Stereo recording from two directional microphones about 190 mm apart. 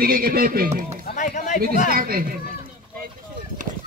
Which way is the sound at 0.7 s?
35° right (ahead or behind).